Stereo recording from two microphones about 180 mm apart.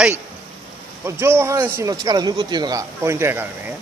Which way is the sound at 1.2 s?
15° right (ahead or behind).